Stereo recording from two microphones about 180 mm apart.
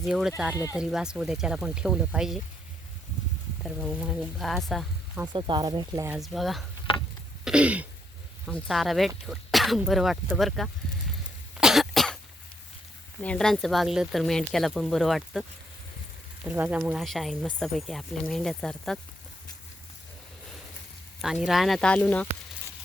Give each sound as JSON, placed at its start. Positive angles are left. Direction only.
{"t": 0.0, "sound": "speech", "side_deg": 0}
{"t": 0.5, "sound": "speech", "side_deg": 20}
{"t": 0.8, "sound": "speech", "side_deg": -5}
{"t": 3.6, "sound": "speech", "side_deg": 0}
{"t": 5.3, "sound": "speech", "side_deg": -25}
{"t": 6.1, "sound": "speech", "side_deg": 0}
{"t": 7.4, "sound": "throat clearing", "side_deg": -5}
{"t": 8.4, "sound": "speech", "side_deg": 5}
{"t": 11.5, "sound": "cough", "side_deg": 0}
{"t": 13.2, "sound": "speech", "side_deg": 5}
{"t": 21.2, "sound": "speech", "side_deg": -5}